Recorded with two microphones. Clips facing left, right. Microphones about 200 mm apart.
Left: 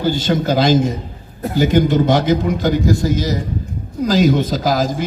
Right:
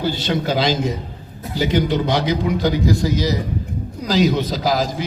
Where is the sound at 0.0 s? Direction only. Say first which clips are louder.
Left 4 dB; 45° left (ahead or behind).